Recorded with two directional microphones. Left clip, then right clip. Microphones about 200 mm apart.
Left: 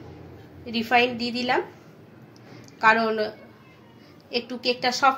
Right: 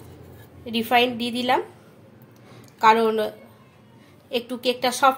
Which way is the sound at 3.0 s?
25° right (ahead or behind).